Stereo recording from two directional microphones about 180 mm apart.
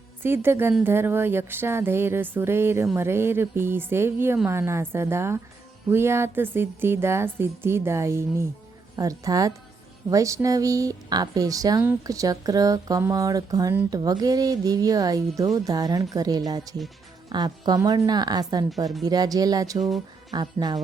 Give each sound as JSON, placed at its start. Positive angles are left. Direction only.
{"t": 0.2, "sound": "a woman's voice", "side_deg": -10}